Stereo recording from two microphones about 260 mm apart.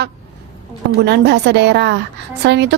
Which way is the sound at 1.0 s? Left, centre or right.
Right.